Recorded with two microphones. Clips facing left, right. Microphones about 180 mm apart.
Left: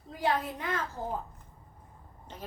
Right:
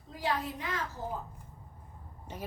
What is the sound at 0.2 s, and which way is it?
Speech, 55° left (ahead or behind).